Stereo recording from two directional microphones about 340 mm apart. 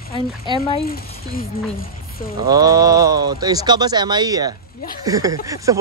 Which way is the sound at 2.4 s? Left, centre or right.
Centre.